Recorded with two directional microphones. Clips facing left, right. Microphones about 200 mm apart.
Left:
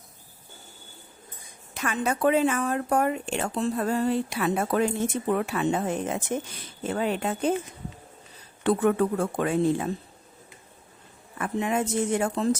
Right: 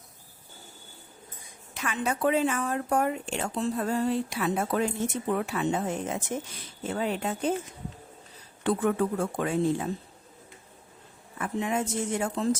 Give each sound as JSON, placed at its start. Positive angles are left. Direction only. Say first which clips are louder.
{"t": 1.7, "sound": "speech", "louder": "left 3 dB", "side_deg": 45}
{"t": 8.6, "sound": "speech", "louder": "left 3 dB", "side_deg": 65}
{"t": 11.3, "sound": "speech", "louder": "left 2 dB", "side_deg": 65}